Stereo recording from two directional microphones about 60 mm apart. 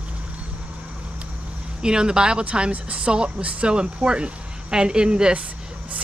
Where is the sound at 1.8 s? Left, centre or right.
Centre.